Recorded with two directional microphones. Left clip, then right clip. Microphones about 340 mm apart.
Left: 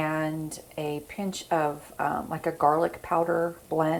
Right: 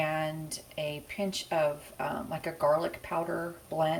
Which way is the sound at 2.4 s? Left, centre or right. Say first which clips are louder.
Left 4 dB; centre.